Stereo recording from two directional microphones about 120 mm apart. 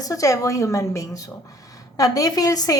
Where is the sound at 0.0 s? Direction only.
30° left (ahead or behind).